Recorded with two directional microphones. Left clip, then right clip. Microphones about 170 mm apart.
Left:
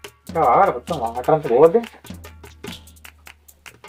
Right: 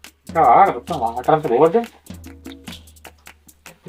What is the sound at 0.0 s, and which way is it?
Speech, centre (ahead or behind).